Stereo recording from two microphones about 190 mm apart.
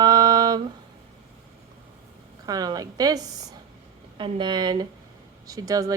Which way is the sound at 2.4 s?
20° right (ahead or behind).